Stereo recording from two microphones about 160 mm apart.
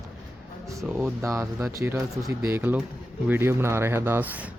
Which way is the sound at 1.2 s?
20° right (ahead or behind).